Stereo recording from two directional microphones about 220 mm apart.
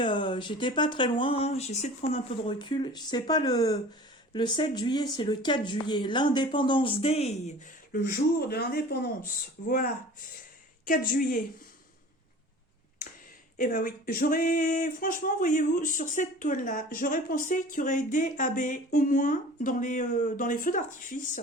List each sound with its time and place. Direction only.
0.0 s speech: 20° left (ahead or behind)
7.9 s speech: 45° left (ahead or behind)
13.6 s speech: 40° left (ahead or behind)